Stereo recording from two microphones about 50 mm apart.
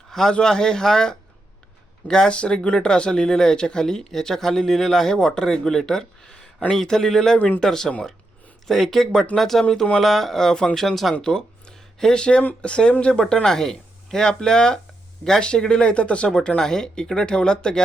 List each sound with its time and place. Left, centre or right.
0.1 s a man's voice: centre
11.2 s speech: centre